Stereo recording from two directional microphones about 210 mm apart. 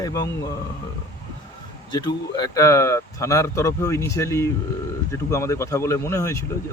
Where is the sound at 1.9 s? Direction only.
20° left (ahead or behind).